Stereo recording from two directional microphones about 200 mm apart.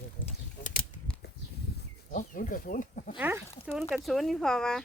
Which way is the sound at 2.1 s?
40° left (ahead or behind).